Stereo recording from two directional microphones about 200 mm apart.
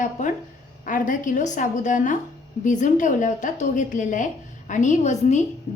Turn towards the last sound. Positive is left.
turn(degrees=35)  # may be behind; listen again after turning